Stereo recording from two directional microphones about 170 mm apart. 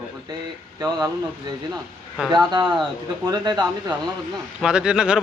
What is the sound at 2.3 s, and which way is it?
Speech, 25° right (ahead or behind).